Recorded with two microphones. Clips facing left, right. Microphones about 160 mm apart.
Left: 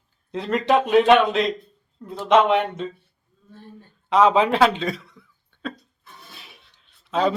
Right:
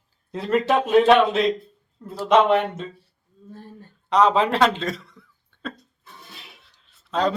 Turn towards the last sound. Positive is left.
turn(degrees=5)  # may be behind; listen again after turning